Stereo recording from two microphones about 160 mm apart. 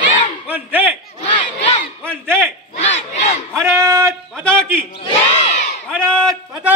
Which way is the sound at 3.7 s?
15° right (ahead or behind).